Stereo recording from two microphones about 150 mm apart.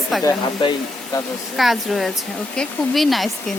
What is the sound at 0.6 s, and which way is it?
Speech, 30° left (ahead or behind).